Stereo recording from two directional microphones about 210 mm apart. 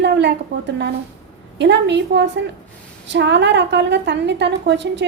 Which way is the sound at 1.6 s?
55° right (ahead or behind).